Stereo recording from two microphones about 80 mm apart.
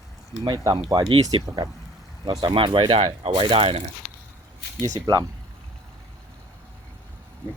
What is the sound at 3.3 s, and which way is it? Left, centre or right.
Speech, right.